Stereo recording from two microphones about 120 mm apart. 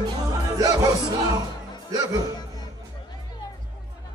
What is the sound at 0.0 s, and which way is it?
Music, 35° right (ahead or behind).